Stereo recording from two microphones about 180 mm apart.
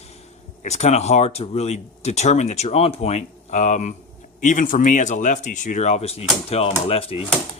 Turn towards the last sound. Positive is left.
turn(degrees=30)  # may be behind; listen again after turning